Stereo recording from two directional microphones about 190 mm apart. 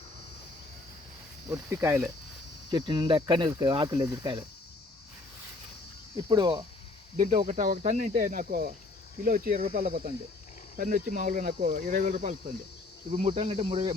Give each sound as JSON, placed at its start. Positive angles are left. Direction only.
{"t": 1.5, "sound": "speech", "side_deg": -10}
{"t": 2.6, "sound": "speech", "side_deg": -25}
{"t": 6.1, "sound": "speech", "side_deg": -20}
{"t": 7.2, "sound": "speech", "side_deg": -40}
{"t": 9.6, "sound": "speech", "side_deg": -30}
{"t": 10.8, "sound": "speech", "side_deg": -45}
{"t": 13.1, "sound": "speech", "side_deg": -30}